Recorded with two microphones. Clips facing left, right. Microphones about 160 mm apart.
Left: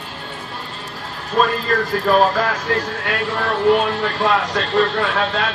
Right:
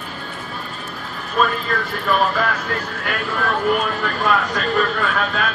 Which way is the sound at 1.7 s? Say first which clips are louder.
Left 4 dB; 40° left (ahead or behind).